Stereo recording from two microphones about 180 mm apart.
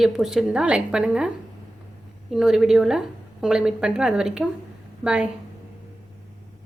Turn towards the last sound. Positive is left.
turn(degrees=-5)  # may be behind; listen again after turning